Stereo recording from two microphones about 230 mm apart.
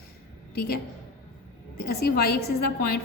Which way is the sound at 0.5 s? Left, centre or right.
Left.